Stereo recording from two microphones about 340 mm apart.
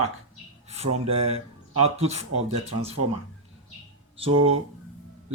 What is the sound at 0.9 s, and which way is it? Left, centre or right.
Speech, centre.